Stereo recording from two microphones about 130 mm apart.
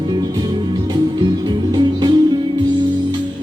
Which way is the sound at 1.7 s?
35° right (ahead or behind).